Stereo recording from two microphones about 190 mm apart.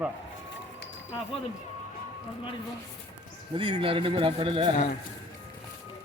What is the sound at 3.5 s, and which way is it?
Speech, 25° right (ahead or behind).